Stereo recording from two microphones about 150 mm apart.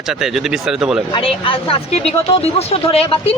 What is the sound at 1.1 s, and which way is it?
A man's voice, 35° left (ahead or behind).